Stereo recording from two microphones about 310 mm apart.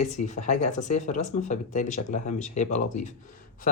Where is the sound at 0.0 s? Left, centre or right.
Left.